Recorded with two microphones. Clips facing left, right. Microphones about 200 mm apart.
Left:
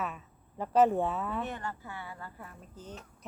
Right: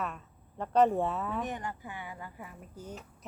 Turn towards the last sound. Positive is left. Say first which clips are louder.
# right 2 dB
turn(degrees=-10)  # may be behind; listen again after turning